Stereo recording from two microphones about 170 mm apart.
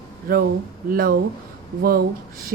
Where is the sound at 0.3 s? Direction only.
55° right (ahead or behind).